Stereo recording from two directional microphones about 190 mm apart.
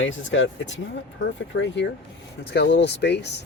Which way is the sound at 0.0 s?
75° left (ahead or behind).